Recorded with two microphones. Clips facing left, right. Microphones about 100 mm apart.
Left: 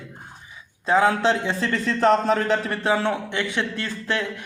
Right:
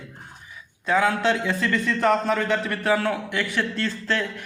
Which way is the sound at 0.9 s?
30° left (ahead or behind).